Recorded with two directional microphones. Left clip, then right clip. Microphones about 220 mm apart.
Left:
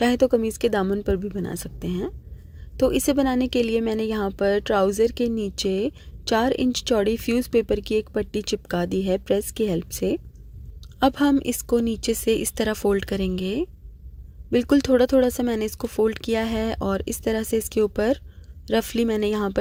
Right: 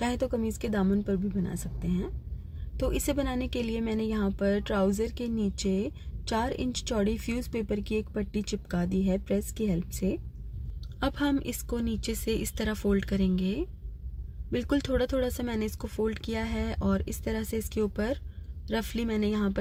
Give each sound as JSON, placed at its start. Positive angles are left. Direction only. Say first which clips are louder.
{"t": 0.0, "sound": "a woman's voice", "louder": "left 10 dB", "side_deg": 35}